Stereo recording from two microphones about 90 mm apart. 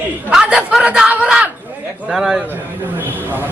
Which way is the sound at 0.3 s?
10° right (ahead or behind).